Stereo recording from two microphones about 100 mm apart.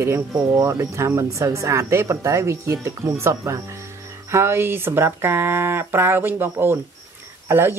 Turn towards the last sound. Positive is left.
turn(degrees=-20)  # may be behind; listen again after turning